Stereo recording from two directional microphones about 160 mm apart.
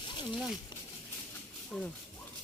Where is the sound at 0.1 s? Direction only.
30° left (ahead or behind).